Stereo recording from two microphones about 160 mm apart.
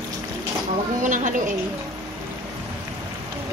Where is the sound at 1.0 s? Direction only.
50° right (ahead or behind).